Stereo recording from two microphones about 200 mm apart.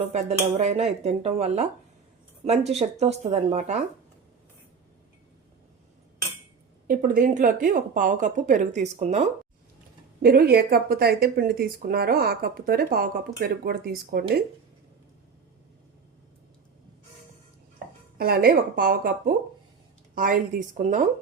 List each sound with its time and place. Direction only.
0.1 s speech: 35° right (ahead or behind)
6.8 s speech: 40° right (ahead or behind)
10.2 s speech: 50° right (ahead or behind)
18.2 s speech: 50° right (ahead or behind)